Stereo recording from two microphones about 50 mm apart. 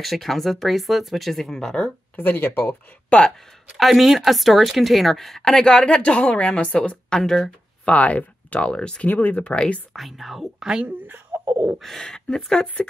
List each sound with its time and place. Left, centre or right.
0.0 s speech: centre
2.1 s speech: left
2.6 s speech: left
3.7 s a woman's voice: centre; by 7.2 s left
7.2 s a woman's voice: centre
7.8 s speech: left
9.0 s speech: left
9.4 s speech: left
9.9 s speech: centre
11.0 s speech: right
11.8 s a woman's voice: centre